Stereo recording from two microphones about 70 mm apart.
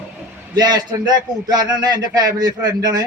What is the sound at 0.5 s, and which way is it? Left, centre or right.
A man's voice, right.